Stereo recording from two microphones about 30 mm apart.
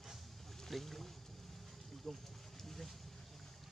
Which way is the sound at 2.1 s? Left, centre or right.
Centre.